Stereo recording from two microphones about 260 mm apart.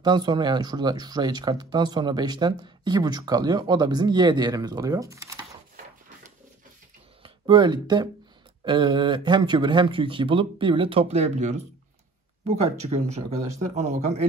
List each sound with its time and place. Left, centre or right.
0.0 s speech: centre
7.2 s speech: centre